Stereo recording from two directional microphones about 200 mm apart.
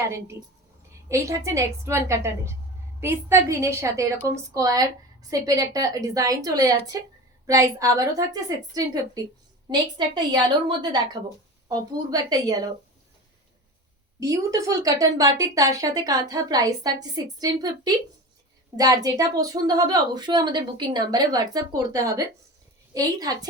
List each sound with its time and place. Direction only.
0.1 s a woman's voice: 15° right (ahead or behind)
14.2 s a woman's voice: 15° right (ahead or behind)